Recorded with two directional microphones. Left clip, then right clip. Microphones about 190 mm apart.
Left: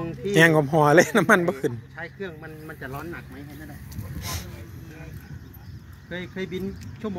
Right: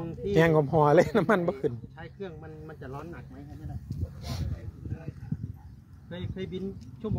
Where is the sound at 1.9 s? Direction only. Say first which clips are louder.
Left 6 dB; 15° right (ahead or behind).